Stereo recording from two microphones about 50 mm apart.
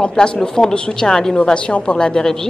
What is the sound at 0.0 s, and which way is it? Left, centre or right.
A woman's voice, centre.